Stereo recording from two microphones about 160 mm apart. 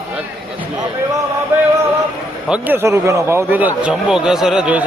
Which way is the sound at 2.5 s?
10° right (ahead or behind).